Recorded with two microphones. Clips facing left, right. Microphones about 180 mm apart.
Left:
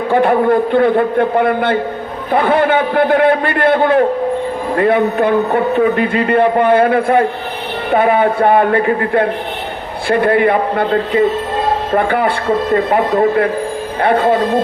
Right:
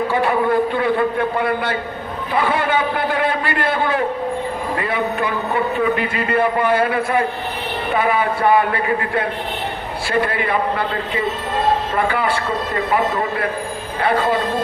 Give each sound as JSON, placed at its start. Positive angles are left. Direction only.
{"t": 0.1, "sound": "a man's voice", "side_deg": 55}
{"t": 11.9, "sound": "a man's voice", "side_deg": 55}
{"t": 14.0, "sound": "a man's voice", "side_deg": 55}